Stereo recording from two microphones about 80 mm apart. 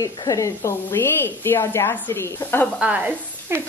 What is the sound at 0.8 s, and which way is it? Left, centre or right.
Speech, left.